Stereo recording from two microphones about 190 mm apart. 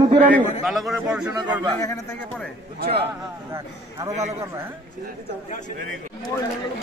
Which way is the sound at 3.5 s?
15° right (ahead or behind).